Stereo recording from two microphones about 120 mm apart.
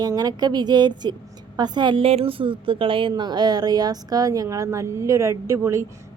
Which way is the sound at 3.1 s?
35° right (ahead or behind).